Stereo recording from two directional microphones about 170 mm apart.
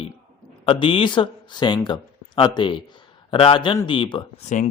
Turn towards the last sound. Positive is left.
turn(degrees=45)  # may be behind; listen again after turning